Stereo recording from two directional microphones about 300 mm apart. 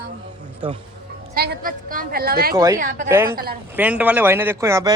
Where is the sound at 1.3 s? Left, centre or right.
Right.